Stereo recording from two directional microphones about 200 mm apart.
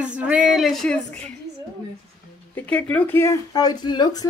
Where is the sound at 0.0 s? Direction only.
5° right (ahead or behind).